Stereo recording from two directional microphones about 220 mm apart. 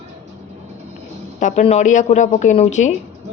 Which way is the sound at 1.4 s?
35° left (ahead or behind).